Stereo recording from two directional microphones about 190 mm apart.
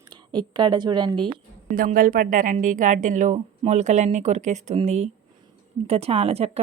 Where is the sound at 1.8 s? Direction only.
45° right (ahead or behind).